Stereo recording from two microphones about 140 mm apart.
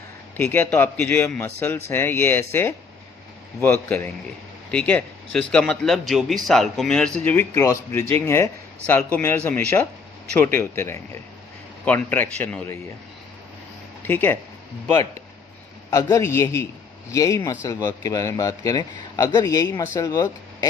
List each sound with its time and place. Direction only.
0.3 s a man's voice: 15° left (ahead or behind)
7.3 s a man's voice: 15° left (ahead or behind)
14.0 s speech: 15° left (ahead or behind)
15.9 s speech: 20° left (ahead or behind)